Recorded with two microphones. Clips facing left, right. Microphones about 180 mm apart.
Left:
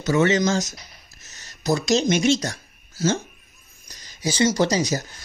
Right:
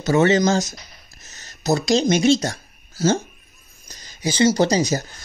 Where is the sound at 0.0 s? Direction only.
30° right (ahead or behind).